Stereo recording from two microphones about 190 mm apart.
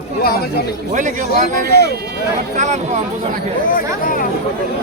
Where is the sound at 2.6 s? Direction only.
40° right (ahead or behind).